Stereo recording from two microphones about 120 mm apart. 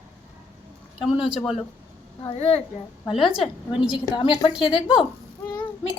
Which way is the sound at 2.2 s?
55° left (ahead or behind).